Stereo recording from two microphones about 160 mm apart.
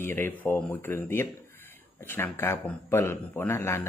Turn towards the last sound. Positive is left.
turn(degrees=15)  # may be behind; listen again after turning